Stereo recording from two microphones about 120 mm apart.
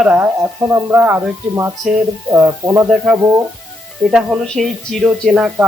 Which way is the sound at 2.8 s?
10° right (ahead or behind).